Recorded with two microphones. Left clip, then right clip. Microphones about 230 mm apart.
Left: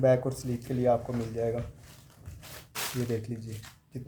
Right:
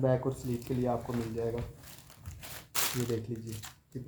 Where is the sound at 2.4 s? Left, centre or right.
Right.